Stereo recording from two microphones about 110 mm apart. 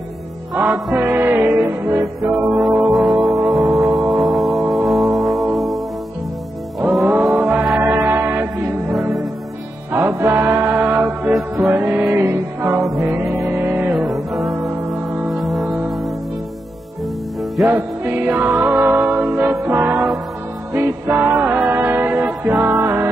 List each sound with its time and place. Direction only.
0.9 s music: 20° right (ahead or behind)
2.2 s music: centre (ahead or behind)
6.8 s music: 5° right (ahead or behind)
7.3 s music: 15° right (ahead or behind)
9.9 s music: 25° right (ahead or behind)
12.8 s music: centre (ahead or behind)
13.5 s music: 20° right (ahead or behind)
13.9 s music: centre (ahead or behind)
17.6 s music: 20° right (ahead or behind)